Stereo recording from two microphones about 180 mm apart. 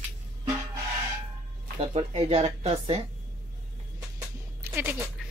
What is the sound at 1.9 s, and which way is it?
Speech, 30° right (ahead or behind).